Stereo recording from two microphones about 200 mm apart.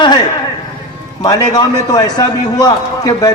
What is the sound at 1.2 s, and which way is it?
A man's voice, 20° left (ahead or behind).